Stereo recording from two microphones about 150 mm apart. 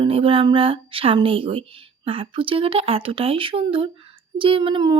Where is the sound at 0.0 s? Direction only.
40° right (ahead or behind).